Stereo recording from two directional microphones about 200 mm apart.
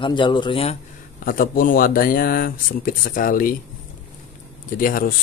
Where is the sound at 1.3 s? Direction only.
45° left (ahead or behind).